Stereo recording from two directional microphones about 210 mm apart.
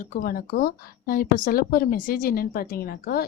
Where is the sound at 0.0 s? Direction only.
40° left (ahead or behind).